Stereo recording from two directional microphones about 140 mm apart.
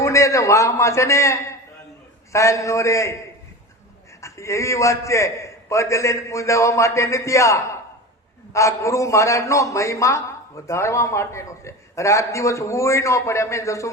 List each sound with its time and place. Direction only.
0.0 s a man's voice: 20° left (ahead or behind)